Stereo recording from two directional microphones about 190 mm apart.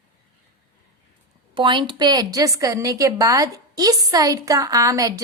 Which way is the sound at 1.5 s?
25° right (ahead or behind).